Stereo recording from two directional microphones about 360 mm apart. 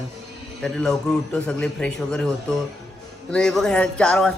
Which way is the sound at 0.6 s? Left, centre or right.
Centre.